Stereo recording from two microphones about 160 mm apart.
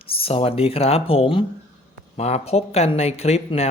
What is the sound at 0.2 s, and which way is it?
Speech, 35° left (ahead or behind).